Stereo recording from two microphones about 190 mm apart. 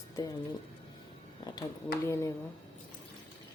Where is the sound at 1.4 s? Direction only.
25° left (ahead or behind).